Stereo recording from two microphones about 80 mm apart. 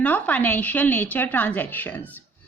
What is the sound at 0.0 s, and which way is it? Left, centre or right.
Speech, centre.